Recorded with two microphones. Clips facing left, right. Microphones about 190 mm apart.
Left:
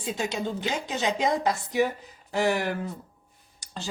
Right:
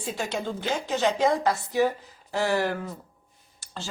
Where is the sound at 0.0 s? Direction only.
15° left (ahead or behind).